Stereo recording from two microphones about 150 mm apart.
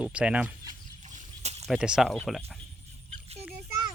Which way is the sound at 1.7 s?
5° right (ahead or behind).